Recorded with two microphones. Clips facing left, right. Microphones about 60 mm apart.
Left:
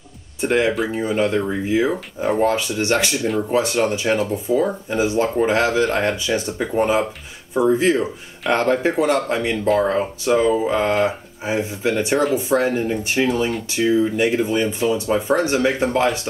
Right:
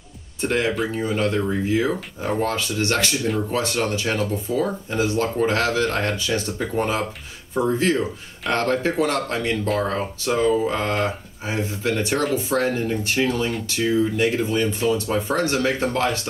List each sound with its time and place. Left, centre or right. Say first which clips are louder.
0.4 s speech: left 3 dB; centre